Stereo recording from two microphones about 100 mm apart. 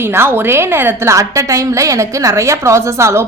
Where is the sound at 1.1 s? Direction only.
30° right (ahead or behind).